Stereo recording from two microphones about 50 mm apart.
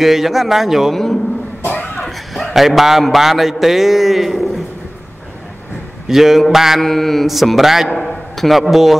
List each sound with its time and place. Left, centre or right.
0.0 s mantra: centre
1.6 s a sound: left
2.0 s a man's voice: centre
6.0 s mantra: centre
6.8 s mantra: centre
7.9 s a man's voice: centre